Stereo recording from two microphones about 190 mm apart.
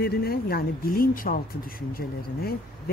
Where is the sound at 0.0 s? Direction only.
55° left (ahead or behind).